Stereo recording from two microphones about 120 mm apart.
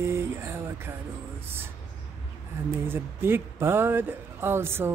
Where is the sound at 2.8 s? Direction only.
20° right (ahead or behind).